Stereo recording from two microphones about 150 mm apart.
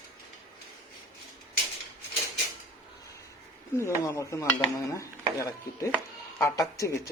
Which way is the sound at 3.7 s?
20° left (ahead or behind).